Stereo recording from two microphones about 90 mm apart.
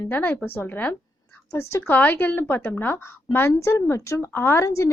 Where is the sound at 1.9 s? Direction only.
20° left (ahead or behind); by 4.3 s 35° left (ahead or behind).